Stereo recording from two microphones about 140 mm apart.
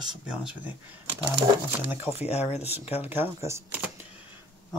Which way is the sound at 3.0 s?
15° right (ahead or behind).